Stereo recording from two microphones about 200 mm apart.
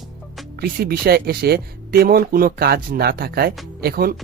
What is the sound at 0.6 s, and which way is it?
Speech, 50° right (ahead or behind).